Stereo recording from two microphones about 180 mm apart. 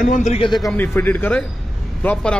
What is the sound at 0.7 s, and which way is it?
A man's voice, 10° left (ahead or behind).